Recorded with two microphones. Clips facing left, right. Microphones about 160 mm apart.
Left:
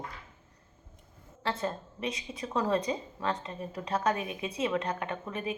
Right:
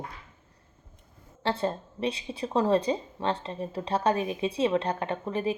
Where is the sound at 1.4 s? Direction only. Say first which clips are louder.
Right 4 dB; 30° right (ahead or behind).